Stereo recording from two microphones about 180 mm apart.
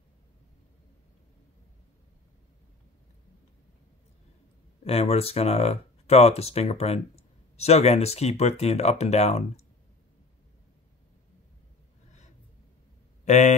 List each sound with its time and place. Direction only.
4.8 s speech: 35° left (ahead or behind)
13.2 s speech: 40° left (ahead or behind)